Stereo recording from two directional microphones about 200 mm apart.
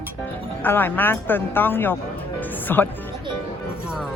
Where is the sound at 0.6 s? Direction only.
10° left (ahead or behind).